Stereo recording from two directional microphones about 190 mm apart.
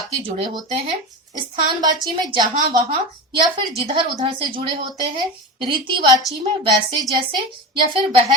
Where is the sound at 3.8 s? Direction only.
30° right (ahead or behind).